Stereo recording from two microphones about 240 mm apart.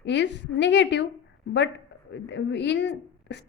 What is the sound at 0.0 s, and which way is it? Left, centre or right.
A woman's voice, left.